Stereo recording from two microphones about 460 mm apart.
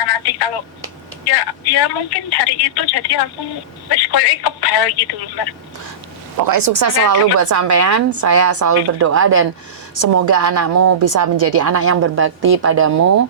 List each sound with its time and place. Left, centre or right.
0.0 s telephone: left
1.3 s a woman's voice: left
6.4 s a woman's voice: right
9.9 s a woman's voice: right